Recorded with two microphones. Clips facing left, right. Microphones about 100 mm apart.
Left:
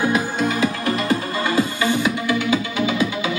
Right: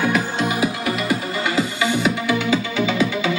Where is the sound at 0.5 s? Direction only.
15° right (ahead or behind).